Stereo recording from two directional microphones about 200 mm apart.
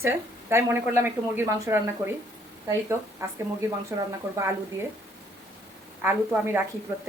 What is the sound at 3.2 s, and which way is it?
Speech, 15° right (ahead or behind).